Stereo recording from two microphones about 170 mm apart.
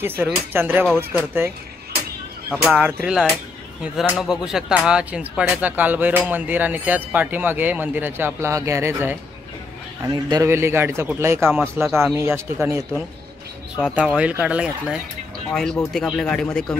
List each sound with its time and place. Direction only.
0.0 s speech: 10° right (ahead or behind)
2.6 s speech: 5° right (ahead or behind)
10.0 s speech: 25° right (ahead or behind)
13.9 s speech: 5° right (ahead or behind)